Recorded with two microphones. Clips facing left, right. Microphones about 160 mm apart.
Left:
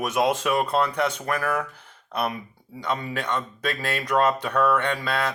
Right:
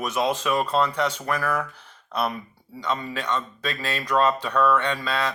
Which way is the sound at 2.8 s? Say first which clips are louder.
Even; 55° left (ahead or behind).